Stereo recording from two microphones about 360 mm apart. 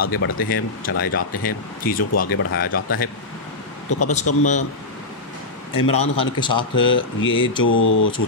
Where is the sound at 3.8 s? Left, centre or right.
Left.